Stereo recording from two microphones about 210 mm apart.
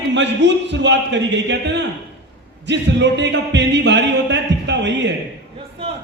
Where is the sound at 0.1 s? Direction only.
60° right (ahead or behind).